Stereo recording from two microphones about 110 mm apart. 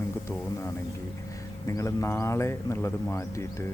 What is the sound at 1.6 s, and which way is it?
Speech, 25° left (ahead or behind).